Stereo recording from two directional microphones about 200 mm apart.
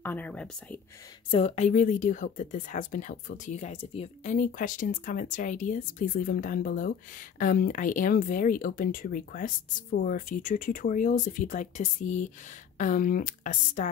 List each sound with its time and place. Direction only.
0.0 s whispering: 10° left (ahead or behind)
1.3 s speech: 30° left (ahead or behind)